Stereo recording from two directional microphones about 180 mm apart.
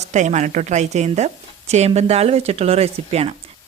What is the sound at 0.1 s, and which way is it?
Speech, 40° right (ahead or behind).